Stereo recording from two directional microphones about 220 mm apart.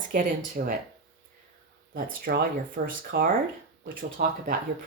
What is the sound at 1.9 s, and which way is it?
Speech, 40° right (ahead or behind).